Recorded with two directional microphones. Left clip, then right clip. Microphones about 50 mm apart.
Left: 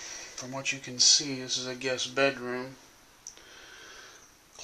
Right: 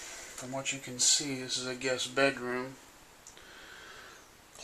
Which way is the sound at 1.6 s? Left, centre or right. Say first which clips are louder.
Left 1 dB; centre.